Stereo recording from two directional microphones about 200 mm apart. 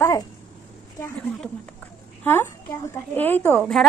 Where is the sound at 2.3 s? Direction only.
10° left (ahead or behind).